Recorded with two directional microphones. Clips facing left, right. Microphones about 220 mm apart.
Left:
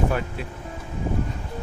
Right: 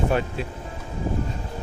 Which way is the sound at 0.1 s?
25° right (ahead or behind).